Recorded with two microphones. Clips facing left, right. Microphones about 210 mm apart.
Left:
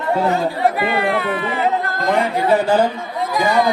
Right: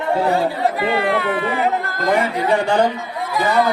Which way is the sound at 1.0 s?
20° left (ahead or behind).